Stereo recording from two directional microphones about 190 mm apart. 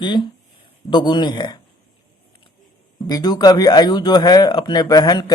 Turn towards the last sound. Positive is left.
turn(degrees=20)  # may be behind; listen again after turning